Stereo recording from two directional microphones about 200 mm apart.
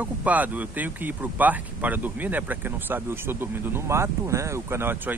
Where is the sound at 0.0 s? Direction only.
5° right (ahead or behind).